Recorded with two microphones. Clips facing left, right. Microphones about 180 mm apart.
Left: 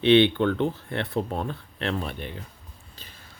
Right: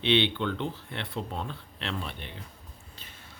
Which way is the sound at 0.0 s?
50° left (ahead or behind).